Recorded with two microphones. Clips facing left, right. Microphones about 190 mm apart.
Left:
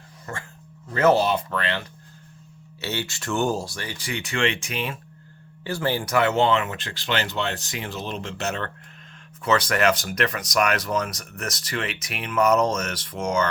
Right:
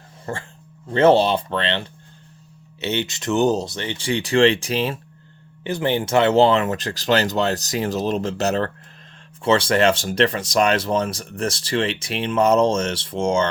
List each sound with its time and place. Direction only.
0.3 s speech: 30° right (ahead or behind)
5.6 s speech: 20° right (ahead or behind)